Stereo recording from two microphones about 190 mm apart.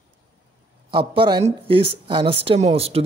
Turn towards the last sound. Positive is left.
turn(degrees=-30)  # may be behind; listen again after turning